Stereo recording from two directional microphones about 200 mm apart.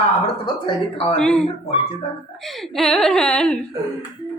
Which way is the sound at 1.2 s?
5° left (ahead or behind).